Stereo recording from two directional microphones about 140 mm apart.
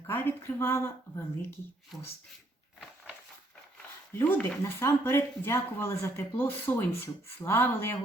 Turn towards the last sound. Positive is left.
turn(degrees=15)  # may be behind; listen again after turning